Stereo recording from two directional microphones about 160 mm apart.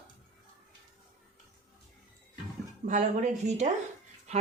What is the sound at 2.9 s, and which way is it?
Speech, 50° right (ahead or behind).